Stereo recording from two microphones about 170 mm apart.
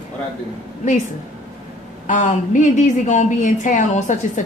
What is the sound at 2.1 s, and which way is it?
A woman's voice, 45° left (ahead or behind).